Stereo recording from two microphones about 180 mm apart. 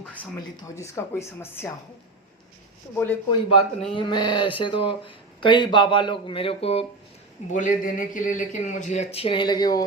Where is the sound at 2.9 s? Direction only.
10° left (ahead or behind).